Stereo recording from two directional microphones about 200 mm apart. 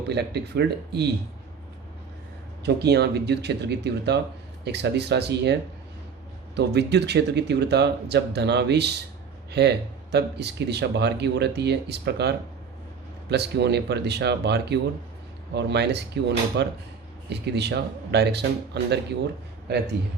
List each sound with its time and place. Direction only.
0.1 s speech: 55° right (ahead or behind)
2.6 s speech: 55° right (ahead or behind)
6.6 s speech: 55° right (ahead or behind)
13.3 s speech: 55° right (ahead or behind)